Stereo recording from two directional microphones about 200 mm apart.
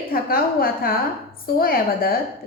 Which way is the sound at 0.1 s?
50° left (ahead or behind).